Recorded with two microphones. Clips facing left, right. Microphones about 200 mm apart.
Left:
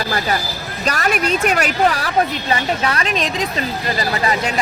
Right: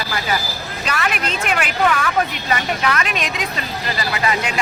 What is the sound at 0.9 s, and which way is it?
A woman's voice, 40° left (ahead or behind).